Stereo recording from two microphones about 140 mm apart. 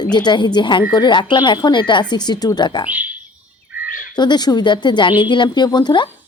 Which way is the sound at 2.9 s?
10° right (ahead or behind).